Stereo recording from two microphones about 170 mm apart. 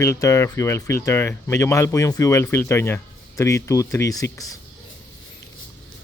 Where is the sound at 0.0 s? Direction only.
15° left (ahead or behind).